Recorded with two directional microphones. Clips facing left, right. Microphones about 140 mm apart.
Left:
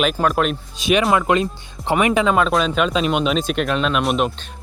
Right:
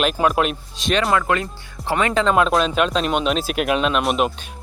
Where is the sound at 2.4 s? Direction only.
Centre (ahead or behind).